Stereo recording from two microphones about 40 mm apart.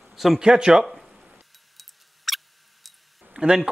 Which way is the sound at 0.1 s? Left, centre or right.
Centre.